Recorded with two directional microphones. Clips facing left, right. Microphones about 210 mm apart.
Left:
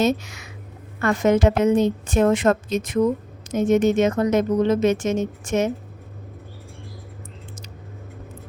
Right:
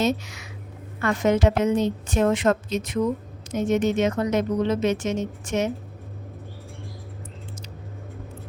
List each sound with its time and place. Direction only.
0.0 s speech: 50° left (ahead or behind)